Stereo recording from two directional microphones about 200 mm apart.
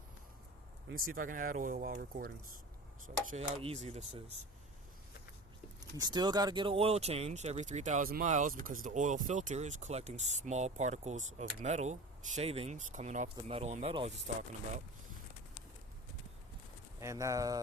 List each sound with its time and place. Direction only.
0.9 s speech: 45° right (ahead or behind)
3.2 s speech: 35° right (ahead or behind)
6.0 s speech: 20° right (ahead or behind)
17.0 s speech: 15° right (ahead or behind)